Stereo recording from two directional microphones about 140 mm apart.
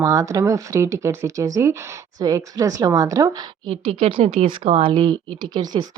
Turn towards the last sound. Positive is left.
turn(degrees=-30)  # may be behind; listen again after turning